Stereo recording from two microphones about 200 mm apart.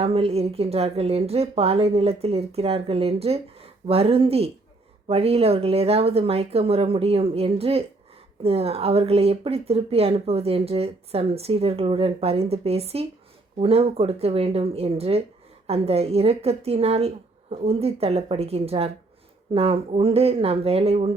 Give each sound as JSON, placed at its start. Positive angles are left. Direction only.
{"t": 0.0, "sound": "speech", "side_deg": -30}